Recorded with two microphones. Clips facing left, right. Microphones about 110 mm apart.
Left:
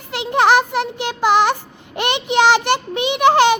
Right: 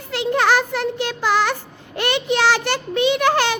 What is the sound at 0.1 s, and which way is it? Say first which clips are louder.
A child's voice: left 3 dB; 15° left (ahead or behind).